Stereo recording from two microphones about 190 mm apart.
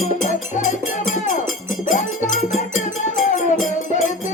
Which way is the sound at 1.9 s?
40° left (ahead or behind).